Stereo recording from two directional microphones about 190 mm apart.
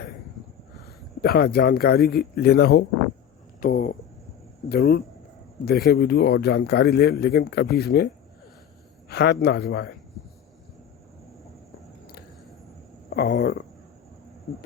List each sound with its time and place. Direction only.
1.2 s a man's voice: 55° left (ahead or behind)
3.6 s a man's voice: 45° left (ahead or behind)
9.0 s a man's voice: 60° left (ahead or behind)
13.1 s speech: 50° left (ahead or behind)